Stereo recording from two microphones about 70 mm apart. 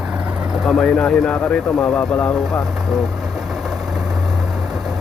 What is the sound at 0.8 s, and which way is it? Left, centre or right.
Speech, centre.